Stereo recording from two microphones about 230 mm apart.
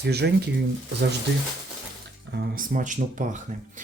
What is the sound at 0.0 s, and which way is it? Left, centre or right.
Speech, right.